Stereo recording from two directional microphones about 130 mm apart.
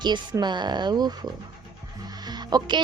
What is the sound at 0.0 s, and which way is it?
Speech, 35° right (ahead or behind).